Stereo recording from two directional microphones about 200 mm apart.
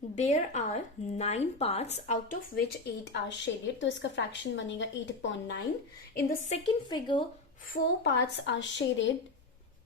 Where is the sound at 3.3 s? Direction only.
65° left (ahead or behind).